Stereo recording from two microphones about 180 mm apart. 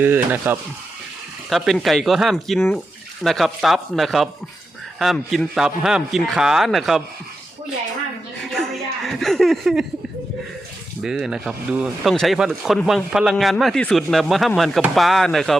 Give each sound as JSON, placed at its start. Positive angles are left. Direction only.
{"t": 0.0, "sound": "speech", "side_deg": -10}
{"t": 1.5, "sound": "speech", "side_deg": 0}
{"t": 8.5, "sound": "a sound", "side_deg": 0}
{"t": 11.0, "sound": "speech", "side_deg": -5}